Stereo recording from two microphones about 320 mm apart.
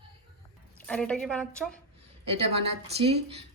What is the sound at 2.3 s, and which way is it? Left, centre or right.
Speech, centre.